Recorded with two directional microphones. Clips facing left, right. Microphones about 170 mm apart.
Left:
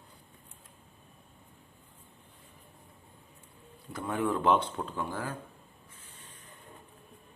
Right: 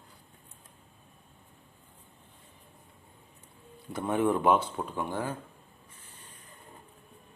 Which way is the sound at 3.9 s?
20° right (ahead or behind).